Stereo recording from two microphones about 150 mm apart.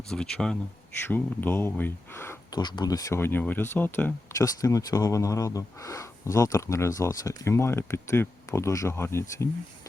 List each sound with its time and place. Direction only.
0.1 s speech: 5° left (ahead or behind)
2.6 s speech: 30° left (ahead or behind)